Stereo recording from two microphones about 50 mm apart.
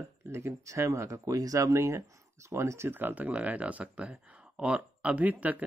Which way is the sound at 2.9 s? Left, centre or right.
Right.